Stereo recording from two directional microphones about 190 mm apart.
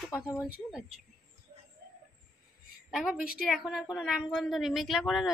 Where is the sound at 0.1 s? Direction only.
Centre (ahead or behind).